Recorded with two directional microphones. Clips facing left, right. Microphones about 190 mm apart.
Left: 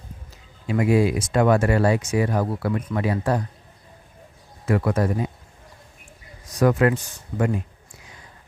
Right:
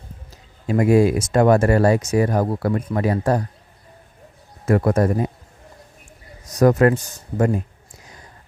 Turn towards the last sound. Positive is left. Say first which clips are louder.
# right 3 dB
turn(degrees=-40)  # may be behind; listen again after turning